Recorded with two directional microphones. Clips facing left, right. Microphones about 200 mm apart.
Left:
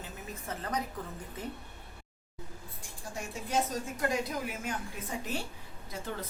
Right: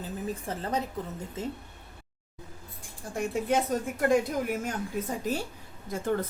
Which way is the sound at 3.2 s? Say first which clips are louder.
Right 6 dB; 55° right (ahead or behind).